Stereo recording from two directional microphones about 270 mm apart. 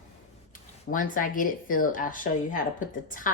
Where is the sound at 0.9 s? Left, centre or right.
Left.